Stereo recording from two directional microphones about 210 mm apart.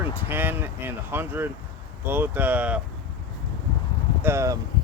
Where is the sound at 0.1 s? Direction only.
10° right (ahead or behind).